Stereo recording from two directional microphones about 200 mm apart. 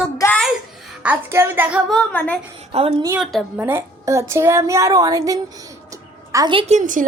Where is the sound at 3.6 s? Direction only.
10° right (ahead or behind).